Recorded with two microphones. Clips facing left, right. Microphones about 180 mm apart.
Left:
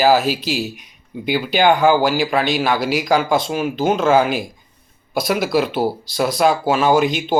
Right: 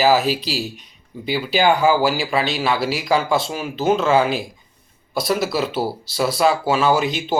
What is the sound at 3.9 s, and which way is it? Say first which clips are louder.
Speech: left 2 dB; 45° left (ahead or behind).